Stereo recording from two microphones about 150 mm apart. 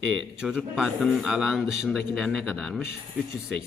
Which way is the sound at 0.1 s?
5° right (ahead or behind).